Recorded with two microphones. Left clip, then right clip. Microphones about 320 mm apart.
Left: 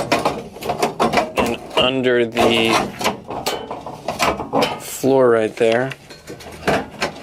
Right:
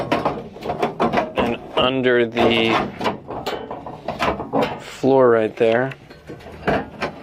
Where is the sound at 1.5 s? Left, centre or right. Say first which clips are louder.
Left 2 dB; centre.